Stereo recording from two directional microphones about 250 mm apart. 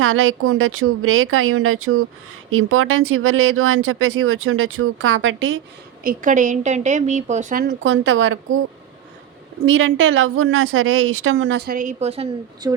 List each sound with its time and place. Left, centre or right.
0.0 s speech: right
6.0 s a woman's voice: right
9.6 s a woman's voice: right